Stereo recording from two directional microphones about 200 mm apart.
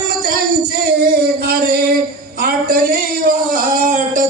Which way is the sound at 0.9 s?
50° right (ahead or behind).